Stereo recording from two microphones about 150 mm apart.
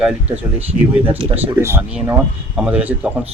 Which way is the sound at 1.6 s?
15° right (ahead or behind).